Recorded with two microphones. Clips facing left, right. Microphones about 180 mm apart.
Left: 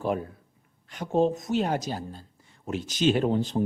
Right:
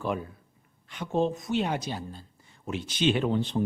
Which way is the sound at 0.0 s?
40° left (ahead or behind).